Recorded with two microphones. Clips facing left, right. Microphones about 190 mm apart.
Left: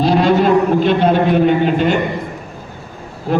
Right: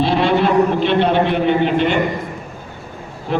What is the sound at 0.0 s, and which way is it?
A man's voice, 40° left (ahead or behind).